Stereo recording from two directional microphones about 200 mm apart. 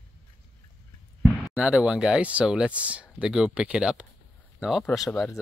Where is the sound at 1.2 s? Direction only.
Centre (ahead or behind).